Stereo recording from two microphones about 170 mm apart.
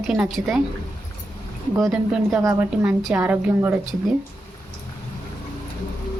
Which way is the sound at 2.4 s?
20° right (ahead or behind).